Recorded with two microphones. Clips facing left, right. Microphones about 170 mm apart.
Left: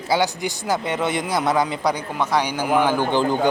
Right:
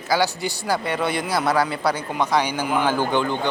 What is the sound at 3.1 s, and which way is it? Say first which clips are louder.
Speech: left 3 dB; 35° left (ahead or behind).